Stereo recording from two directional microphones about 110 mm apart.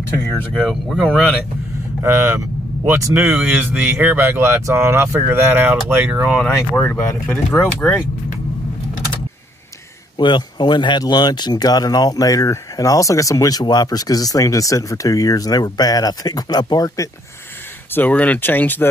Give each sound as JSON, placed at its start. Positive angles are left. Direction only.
{"t": 0.5, "sound": "speech", "side_deg": 0}
{"t": 2.0, "sound": "speech", "side_deg": -20}
{"t": 3.2, "sound": "speech", "side_deg": -10}
{"t": 6.8, "sound": "speech", "side_deg": 20}
{"t": 10.1, "sound": "speech", "side_deg": 45}
{"t": 17.9, "sound": "speech", "side_deg": 15}